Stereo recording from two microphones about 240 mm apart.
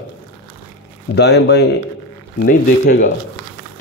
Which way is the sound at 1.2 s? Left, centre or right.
Left.